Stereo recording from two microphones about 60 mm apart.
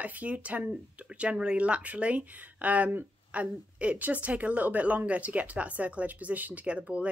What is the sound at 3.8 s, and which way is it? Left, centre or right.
Speech, right.